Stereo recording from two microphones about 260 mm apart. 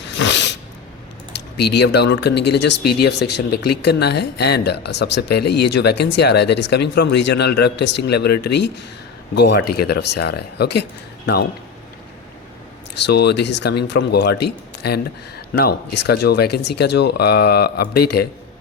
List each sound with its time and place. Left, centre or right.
0.1 s sneeze: left
1.5 s speech: left
13.1 s speech: left